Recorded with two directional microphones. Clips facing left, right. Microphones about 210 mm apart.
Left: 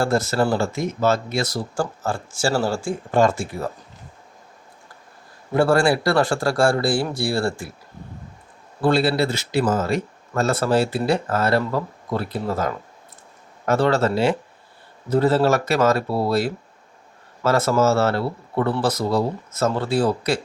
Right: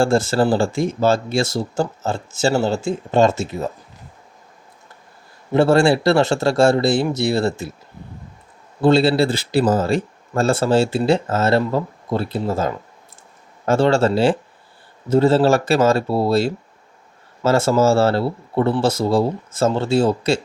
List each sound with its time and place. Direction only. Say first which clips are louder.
0.0 s speech: right 4 dB; 30° right (ahead or behind)
5.5 s speech: right 3 dB; 25° right (ahead or behind)
8.8 s speech: right 4 dB; 25° right (ahead or behind)